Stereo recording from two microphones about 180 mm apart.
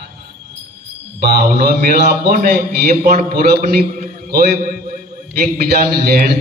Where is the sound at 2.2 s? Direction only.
55° right (ahead or behind).